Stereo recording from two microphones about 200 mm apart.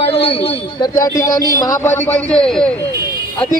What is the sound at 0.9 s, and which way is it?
A man's voice, 15° left (ahead or behind).